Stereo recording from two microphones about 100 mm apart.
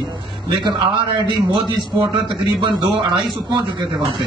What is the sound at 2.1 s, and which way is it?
Speech, 60° right (ahead or behind).